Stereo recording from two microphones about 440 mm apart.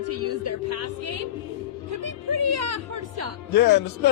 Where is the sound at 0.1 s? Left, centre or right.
Right.